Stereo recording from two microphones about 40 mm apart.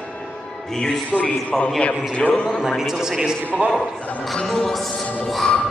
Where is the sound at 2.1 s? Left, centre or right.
Left.